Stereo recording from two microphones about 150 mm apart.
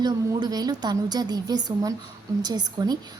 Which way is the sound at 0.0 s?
30° right (ahead or behind).